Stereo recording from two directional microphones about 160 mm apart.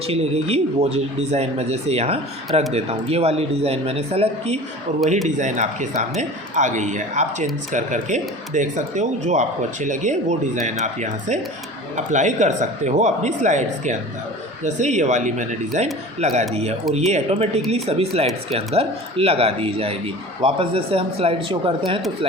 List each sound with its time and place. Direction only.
0.1 s speech: 40° right (ahead or behind)